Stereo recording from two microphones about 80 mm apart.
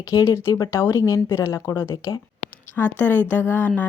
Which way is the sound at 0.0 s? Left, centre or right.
Left.